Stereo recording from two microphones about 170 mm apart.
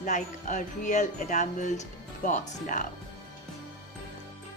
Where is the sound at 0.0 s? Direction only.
45° left (ahead or behind).